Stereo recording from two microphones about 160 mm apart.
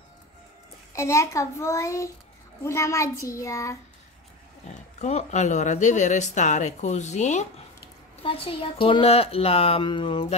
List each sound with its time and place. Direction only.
0.9 s a child's voice: 20° left (ahead or behind)
4.9 s speech: 45° left (ahead or behind)
8.2 s speech: 35° left (ahead or behind)